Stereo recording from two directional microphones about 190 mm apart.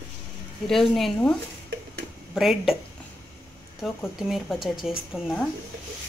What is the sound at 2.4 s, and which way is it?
Speech, centre (ahead or behind).